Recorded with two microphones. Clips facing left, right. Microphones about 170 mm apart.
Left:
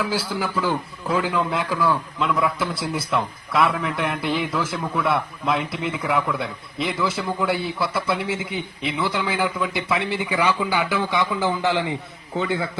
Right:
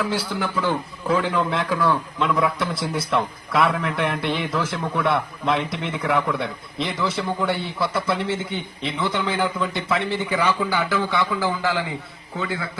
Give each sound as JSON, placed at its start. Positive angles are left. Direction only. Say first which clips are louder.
{"t": 0.0, "sound": "a man's voice", "louder": "even", "side_deg": 0}